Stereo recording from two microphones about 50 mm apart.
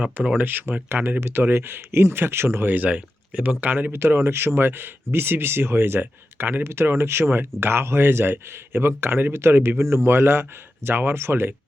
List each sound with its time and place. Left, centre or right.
0.3 s speech: right
2.6 s speech: right
3.9 s speech: right
6.7 s speech: right